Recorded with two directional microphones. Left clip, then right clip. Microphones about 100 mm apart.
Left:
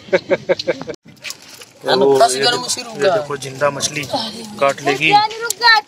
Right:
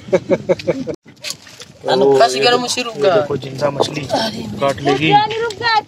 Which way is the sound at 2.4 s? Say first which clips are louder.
Right 3 dB; 20° right (ahead or behind).